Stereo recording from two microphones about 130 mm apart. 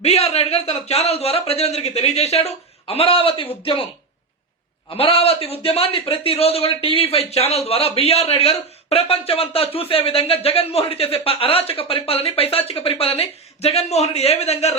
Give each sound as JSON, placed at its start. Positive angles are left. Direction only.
{"t": 0.0, "sound": "a man's voice", "side_deg": 50}
{"t": 4.9, "sound": "a man's voice", "side_deg": 50}